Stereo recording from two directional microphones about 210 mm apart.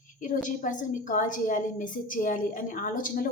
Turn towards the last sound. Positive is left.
turn(degrees=40)  # may be behind; listen again after turning